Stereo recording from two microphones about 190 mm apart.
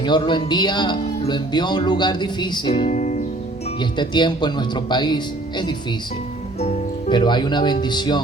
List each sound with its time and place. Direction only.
0.0 s speech: 25° left (ahead or behind); by 3.2 s 40° left (ahead or behind)
3.8 s speech: 25° left (ahead or behind)